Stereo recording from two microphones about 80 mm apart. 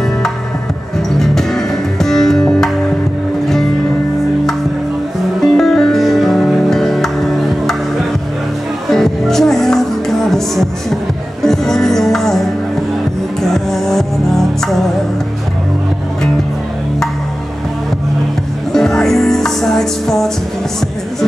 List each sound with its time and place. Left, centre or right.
1.2 s music: centre
5.4 s music: centre
8.9 s music: centre
13.4 s music: centre
18.7 s music: centre